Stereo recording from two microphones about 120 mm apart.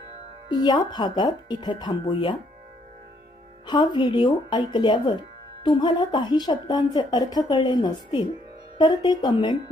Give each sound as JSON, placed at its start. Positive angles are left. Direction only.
{"t": 0.4, "sound": "a woman's voice", "side_deg": 35}
{"t": 3.7, "sound": "a woman's voice", "side_deg": 40}